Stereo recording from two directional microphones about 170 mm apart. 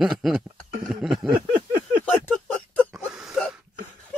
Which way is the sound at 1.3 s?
55° right (ahead or behind).